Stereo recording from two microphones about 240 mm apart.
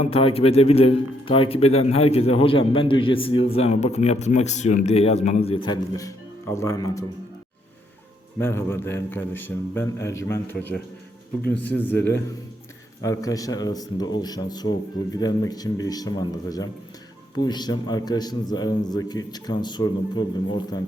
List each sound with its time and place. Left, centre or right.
0.0 s a man's voice: left
8.4 s speech: centre
13.0 s speech: centre